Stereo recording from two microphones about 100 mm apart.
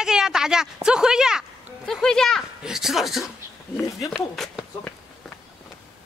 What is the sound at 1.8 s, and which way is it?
Speech, 5° left (ahead or behind).